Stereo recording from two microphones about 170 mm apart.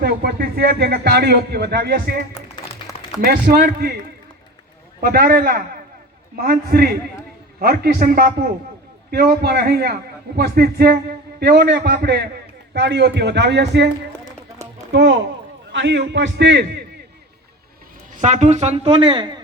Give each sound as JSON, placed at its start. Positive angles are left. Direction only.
{"t": 0.0, "sound": "a man's voice", "side_deg": -75}
{"t": 3.2, "sound": "a man's voice", "side_deg": -60}
{"t": 4.9, "sound": "a man's voice", "side_deg": -65}
{"t": 14.9, "sound": "a man's voice", "side_deg": -90}
{"t": 18.1, "sound": "a woman's voice", "side_deg": -45}